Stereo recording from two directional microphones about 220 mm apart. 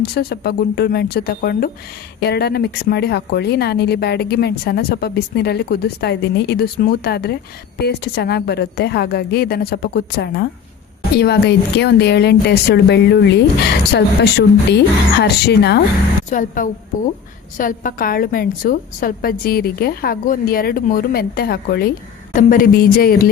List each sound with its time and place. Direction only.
0.1 s a woman's voice: 45° left (ahead or behind)
16.3 s a woman's voice: 35° left (ahead or behind)